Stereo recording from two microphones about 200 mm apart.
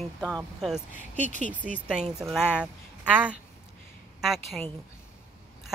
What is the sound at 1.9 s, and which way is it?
Speech, 5° right (ahead or behind).